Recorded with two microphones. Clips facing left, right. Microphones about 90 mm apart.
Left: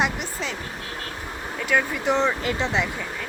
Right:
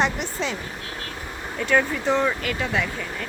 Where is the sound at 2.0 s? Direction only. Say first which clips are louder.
Even; 20° left (ahead or behind).